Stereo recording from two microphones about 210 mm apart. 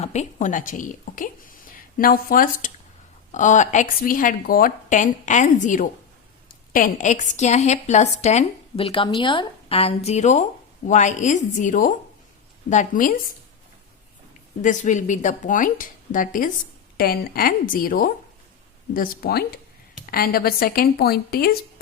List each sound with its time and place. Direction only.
0.0 s a woman's voice: 35° left (ahead or behind)
14.6 s a woman's voice: 35° left (ahead or behind)